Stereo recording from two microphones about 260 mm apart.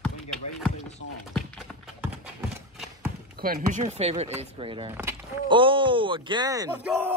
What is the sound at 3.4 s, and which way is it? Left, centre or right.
Speech, right.